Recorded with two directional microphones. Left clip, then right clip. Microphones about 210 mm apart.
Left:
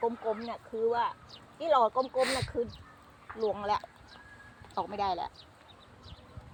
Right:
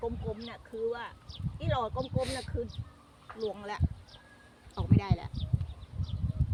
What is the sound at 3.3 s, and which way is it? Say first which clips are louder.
Speech: left 6 dB; 30° right (ahead or behind).